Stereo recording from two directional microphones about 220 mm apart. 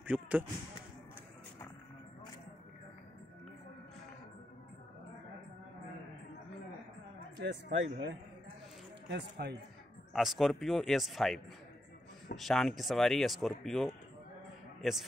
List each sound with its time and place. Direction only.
0.0 s speech: 5° right (ahead or behind)
7.3 s a man's voice: 55° right (ahead or behind)
9.1 s speech: 50° right (ahead or behind)
10.1 s a man's voice: centre (ahead or behind)